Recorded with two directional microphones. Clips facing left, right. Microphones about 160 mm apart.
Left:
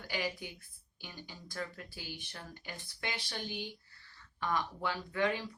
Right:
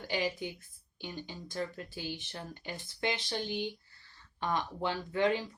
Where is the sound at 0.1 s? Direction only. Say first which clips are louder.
Right 4 dB; 25° right (ahead or behind).